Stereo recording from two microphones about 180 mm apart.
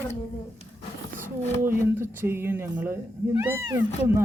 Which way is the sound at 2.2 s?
15° right (ahead or behind).